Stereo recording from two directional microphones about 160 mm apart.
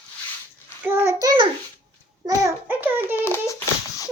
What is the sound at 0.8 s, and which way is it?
Child singing, 15° right (ahead or behind).